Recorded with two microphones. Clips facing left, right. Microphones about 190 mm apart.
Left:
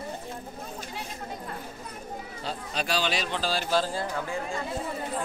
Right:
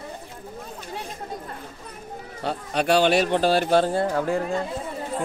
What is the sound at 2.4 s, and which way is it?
Speech, 60° right (ahead or behind).